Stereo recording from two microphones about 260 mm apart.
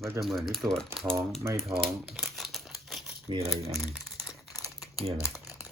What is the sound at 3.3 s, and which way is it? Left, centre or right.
Speech, right.